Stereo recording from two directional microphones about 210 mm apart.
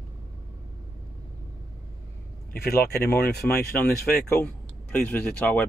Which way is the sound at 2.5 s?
50° left (ahead or behind).